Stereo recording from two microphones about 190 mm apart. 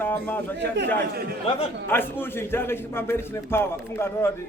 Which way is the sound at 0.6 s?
65° right (ahead or behind).